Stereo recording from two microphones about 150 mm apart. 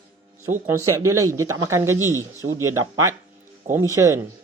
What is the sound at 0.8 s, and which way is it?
Speech, 20° right (ahead or behind).